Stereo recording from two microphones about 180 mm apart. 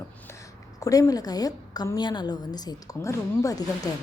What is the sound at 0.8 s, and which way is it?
A woman's voice, 20° left (ahead or behind).